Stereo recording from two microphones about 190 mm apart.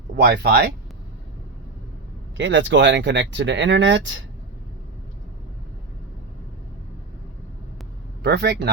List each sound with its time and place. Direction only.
0.2 s speech: 55° right (ahead or behind)
2.4 s speech: 70° right (ahead or behind)
8.2 s speech: 60° right (ahead or behind)